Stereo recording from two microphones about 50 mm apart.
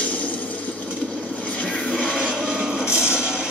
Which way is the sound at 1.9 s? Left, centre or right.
Centre.